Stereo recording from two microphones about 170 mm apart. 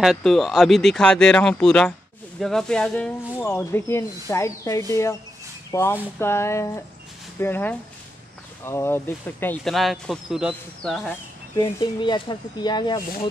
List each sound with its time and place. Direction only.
0.0 s speech: centre (ahead or behind)
9.7 s speech: centre (ahead or behind)
11.5 s speech: 25° left (ahead or behind)